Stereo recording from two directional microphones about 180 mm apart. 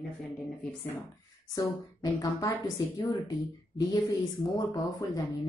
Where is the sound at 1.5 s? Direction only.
20° left (ahead or behind).